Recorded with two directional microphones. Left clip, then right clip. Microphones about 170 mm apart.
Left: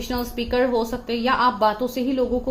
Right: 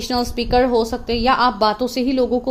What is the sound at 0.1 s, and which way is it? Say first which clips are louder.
A woman's voice: right 7 dB; 45° right (ahead or behind).